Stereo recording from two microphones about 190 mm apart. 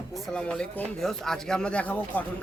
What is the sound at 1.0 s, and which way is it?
Speech, 5° left (ahead or behind).